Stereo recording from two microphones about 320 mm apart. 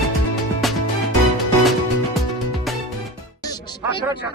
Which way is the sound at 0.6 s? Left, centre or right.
Centre.